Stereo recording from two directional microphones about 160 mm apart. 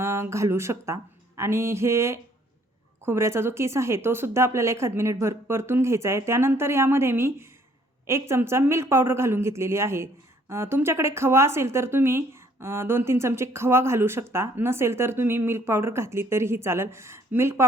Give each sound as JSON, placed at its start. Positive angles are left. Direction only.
{"t": 0.0, "sound": "speech", "side_deg": -15}